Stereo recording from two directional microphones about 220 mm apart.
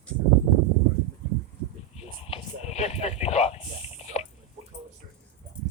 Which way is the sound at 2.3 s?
30° left (ahead or behind).